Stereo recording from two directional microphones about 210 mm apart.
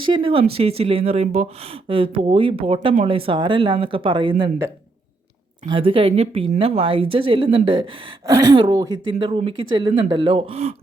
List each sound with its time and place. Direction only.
0.0 s speech: 25° right (ahead or behind)
5.6 s speech: 25° right (ahead or behind)